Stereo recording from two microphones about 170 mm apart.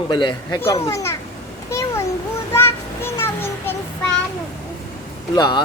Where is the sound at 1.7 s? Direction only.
15° left (ahead or behind).